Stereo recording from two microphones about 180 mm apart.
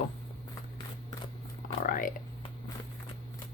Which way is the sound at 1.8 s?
50° left (ahead or behind).